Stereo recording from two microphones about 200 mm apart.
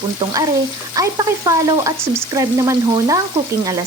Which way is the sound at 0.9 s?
15° right (ahead or behind).